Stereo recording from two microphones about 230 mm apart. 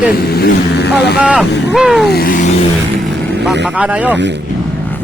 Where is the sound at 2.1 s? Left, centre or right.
Left.